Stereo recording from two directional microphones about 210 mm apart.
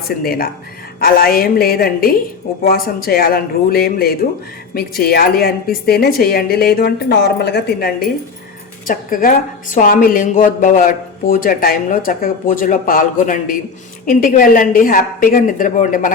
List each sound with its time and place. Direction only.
0.2 s a woman's voice: 45° left (ahead or behind)